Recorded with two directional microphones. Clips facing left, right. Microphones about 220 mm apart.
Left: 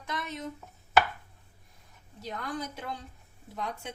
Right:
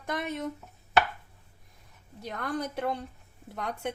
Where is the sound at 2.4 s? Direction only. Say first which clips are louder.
Right 6 dB; 60° right (ahead or behind).